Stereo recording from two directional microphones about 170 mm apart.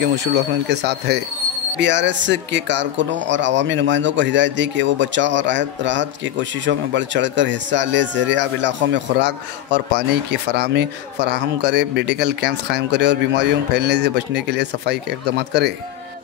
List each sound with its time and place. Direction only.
0.1 s speech: 80° right
1.8 s speech: 90° right; by 15.7 s 75° right (ahead or behind)